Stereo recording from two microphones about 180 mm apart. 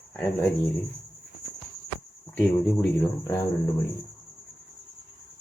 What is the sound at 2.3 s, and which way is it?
Speech, 5° left (ahead or behind).